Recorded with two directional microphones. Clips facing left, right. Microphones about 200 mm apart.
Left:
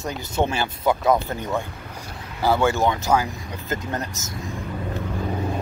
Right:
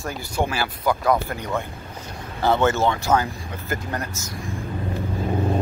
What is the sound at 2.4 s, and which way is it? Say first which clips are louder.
Speech: even; 10° left (ahead or behind).